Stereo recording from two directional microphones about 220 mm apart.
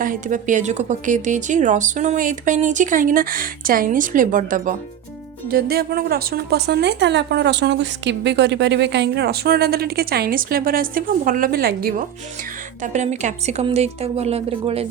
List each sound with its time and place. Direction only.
0.0 s a woman's voice: 35° right (ahead or behind)